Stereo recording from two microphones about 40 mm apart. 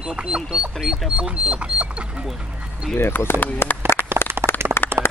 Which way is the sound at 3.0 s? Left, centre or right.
Left.